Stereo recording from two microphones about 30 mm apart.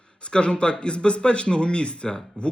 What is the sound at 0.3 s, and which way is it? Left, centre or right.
A man's voice, left.